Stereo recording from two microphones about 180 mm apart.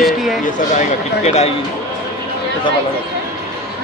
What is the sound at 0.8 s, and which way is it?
Speech, 35° left (ahead or behind).